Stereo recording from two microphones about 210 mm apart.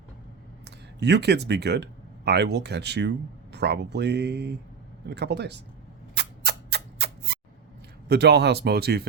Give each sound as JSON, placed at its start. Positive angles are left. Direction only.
{"t": 0.6, "sound": "speech", "side_deg": -55}
{"t": 6.1, "sound": "a sound", "side_deg": -50}
{"t": 8.0, "sound": "speech", "side_deg": -50}